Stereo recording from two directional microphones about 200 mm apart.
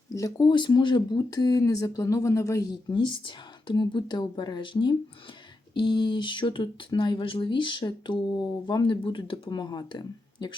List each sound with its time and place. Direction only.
0.1 s speech: 15° left (ahead or behind)